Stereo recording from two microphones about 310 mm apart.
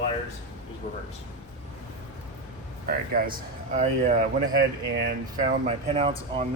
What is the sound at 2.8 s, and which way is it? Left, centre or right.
Speech, right.